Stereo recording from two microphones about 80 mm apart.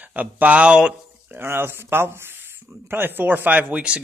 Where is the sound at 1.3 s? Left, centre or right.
Right.